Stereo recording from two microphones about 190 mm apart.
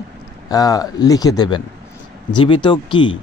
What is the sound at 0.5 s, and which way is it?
A man's voice, 20° left (ahead or behind).